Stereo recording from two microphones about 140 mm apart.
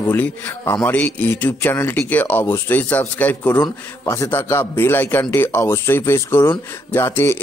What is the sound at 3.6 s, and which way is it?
A man's voice, 20° left (ahead or behind).